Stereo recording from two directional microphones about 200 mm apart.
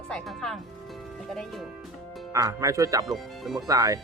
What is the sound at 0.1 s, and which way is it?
Speech, 5° left (ahead or behind).